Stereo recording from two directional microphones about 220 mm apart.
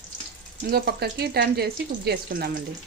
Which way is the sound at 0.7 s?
45° right (ahead or behind).